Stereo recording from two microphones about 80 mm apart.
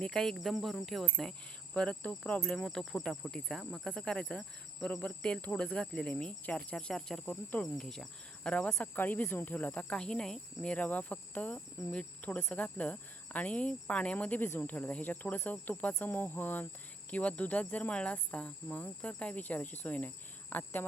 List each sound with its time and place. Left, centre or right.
0.0 s insect: centre
0.3 s speech: centre
1.0 s insect: centre
2.4 s speech: centre
3.8 s insect: centre
7.6 s speech: centre; by 9.2 s left
9.3 s insect: left
12.6 s speech: centre